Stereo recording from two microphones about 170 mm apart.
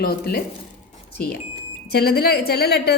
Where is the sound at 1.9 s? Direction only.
65° left (ahead or behind).